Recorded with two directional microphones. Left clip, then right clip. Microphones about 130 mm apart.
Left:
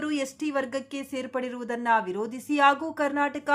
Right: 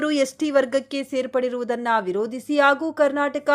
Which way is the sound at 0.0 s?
30° right (ahead or behind).